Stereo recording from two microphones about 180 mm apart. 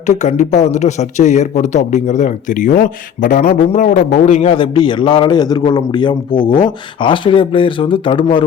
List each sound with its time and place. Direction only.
0.1 s a man's voice: 40° left (ahead or behind)